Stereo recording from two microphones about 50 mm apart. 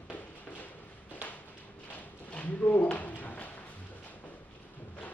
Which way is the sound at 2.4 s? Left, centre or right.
Left.